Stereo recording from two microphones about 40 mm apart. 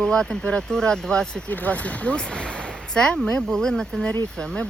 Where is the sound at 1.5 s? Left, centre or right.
Left.